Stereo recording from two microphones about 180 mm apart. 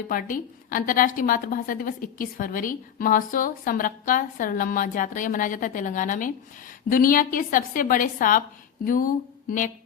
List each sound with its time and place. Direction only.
0.1 s a woman's voice: 50° left (ahead or behind)